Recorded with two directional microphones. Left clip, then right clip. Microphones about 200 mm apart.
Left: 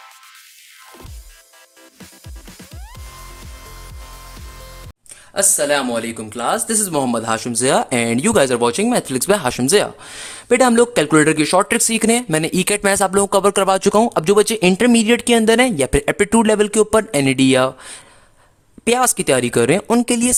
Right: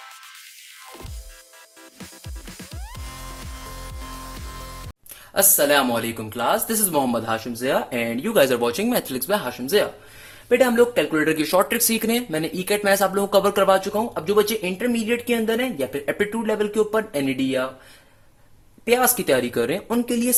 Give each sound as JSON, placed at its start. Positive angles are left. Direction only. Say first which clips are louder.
{"t": 2.6, "sound": "music", "louder": "right 1 dB", "side_deg": 0}
{"t": 5.3, "sound": "speech", "louder": "left 1 dB", "side_deg": 10}
{"t": 11.3, "sound": "speech", "louder": "left 5 dB", "side_deg": 30}
{"t": 18.9, "sound": "speech", "louder": "left 3 dB", "side_deg": 55}